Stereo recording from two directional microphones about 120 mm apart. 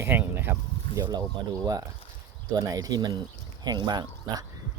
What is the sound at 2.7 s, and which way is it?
Speech, 30° right (ahead or behind).